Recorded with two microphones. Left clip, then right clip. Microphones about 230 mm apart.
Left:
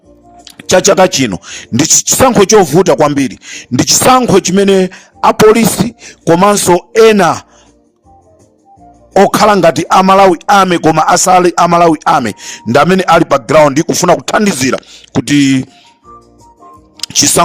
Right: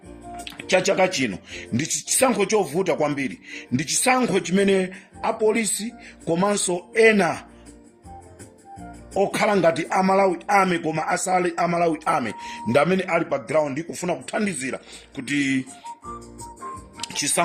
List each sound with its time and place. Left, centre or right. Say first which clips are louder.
0.7 s speech: left 13 dB; left
9.1 s speech: left 14 dB; left